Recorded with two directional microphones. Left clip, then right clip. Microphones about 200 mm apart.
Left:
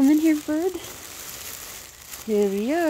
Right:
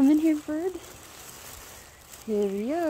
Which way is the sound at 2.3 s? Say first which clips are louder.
Left 5 dB; 15° left (ahead or behind).